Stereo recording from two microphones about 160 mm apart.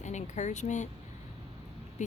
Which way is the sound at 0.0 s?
45° left (ahead or behind).